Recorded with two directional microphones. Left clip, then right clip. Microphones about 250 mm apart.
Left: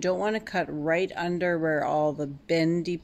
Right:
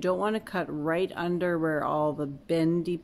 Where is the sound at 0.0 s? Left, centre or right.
Centre.